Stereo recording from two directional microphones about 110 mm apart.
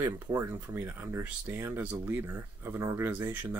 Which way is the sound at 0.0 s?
25° right (ahead or behind).